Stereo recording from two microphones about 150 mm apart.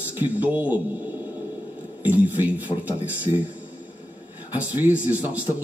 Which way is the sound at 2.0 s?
10° right (ahead or behind).